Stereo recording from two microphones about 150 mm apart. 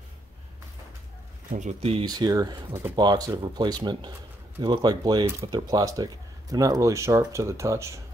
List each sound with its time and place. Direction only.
1.5 s speech: 50° right (ahead or behind)
2.0 s speech: 25° right (ahead or behind)